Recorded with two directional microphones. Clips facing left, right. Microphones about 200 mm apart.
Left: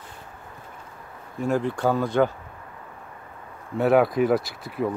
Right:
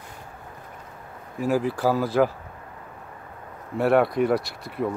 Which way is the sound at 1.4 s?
5° right (ahead or behind).